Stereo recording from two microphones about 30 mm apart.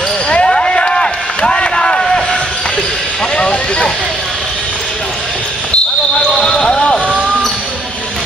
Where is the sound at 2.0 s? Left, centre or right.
Centre.